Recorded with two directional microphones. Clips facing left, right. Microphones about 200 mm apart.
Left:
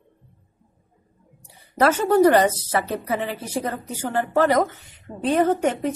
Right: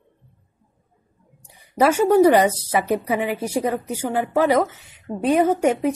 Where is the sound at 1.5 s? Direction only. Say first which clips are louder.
Right 2 dB; 10° right (ahead or behind).